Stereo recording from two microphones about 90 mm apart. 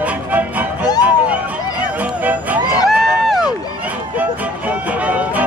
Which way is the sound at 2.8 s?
Centre (ahead or behind).